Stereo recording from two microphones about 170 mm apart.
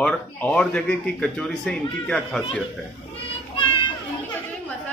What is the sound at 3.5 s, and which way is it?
Child singing, 30° left (ahead or behind).